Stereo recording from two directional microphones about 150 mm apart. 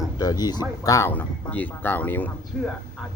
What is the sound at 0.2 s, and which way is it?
A man's voice, 25° left (ahead or behind).